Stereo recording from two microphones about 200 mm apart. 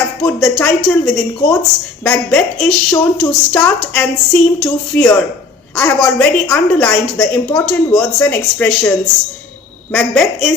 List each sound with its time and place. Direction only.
0.2 s a woman's voice: 5° left (ahead or behind)
9.9 s a woman's voice: centre (ahead or behind)